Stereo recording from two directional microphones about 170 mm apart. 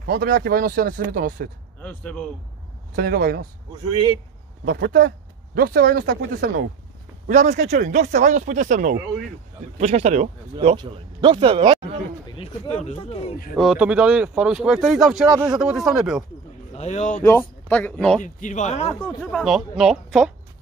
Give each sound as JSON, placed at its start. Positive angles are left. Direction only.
{"t": 0.0, "sound": "speech", "side_deg": -65}
{"t": 1.8, "sound": "speech", "side_deg": 10}
{"t": 3.0, "sound": "speech", "side_deg": -60}
{"t": 3.9, "sound": "a man's voice", "side_deg": -30}
{"t": 4.6, "sound": "speech", "side_deg": -90}
{"t": 7.2, "sound": "a man's voice", "side_deg": -45}
{"t": 12.3, "sound": "speech", "side_deg": 35}
{"t": 13.6, "sound": "speech", "side_deg": -5}
{"t": 16.7, "sound": "a man's voice", "side_deg": 40}
{"t": 17.2, "sound": "speech", "side_deg": 15}
{"t": 18.2, "sound": "speech", "side_deg": 45}
{"t": 19.0, "sound": "speech", "side_deg": 0}